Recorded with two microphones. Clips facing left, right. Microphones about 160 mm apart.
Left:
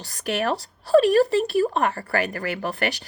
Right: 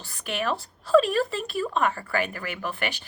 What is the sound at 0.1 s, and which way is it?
Speech, 40° left (ahead or behind).